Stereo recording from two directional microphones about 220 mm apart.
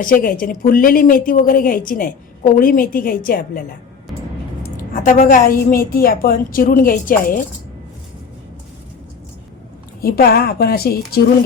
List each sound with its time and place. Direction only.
0.0 s speech: 40° left (ahead or behind)
4.6 s speech: 40° left (ahead or behind)
10.0 s a woman's voice: 45° left (ahead or behind)